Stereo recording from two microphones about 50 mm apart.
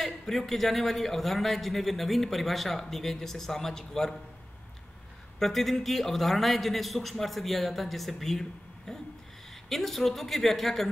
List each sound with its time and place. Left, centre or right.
0.0 s a man's voice: centre
5.4 s a man's voice: centre